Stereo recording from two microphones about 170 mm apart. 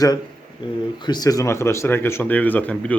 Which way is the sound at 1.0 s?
25° left (ahead or behind).